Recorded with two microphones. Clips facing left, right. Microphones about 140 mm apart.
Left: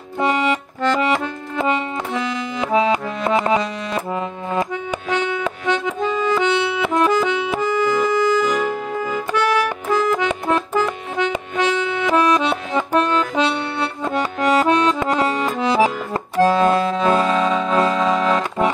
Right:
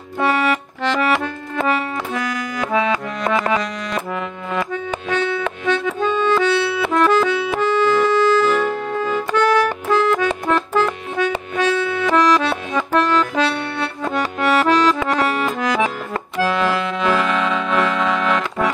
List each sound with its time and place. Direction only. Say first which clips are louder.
0.2 s music: right 1 dB; 20° left (ahead or behind)
1.0 s accordion: right 1 dB; 20° left (ahead or behind)
5.1 s accordion: right 1 dB; 15° left (ahead or behind); by 18.7 s 30° left (ahead or behind)